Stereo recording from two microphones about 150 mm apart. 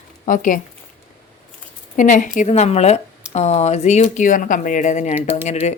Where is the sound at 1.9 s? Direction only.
60° left (ahead or behind).